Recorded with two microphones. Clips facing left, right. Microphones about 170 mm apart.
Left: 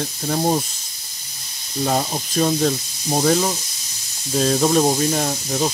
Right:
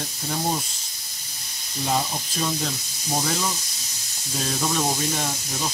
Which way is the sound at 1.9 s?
45° left (ahead or behind).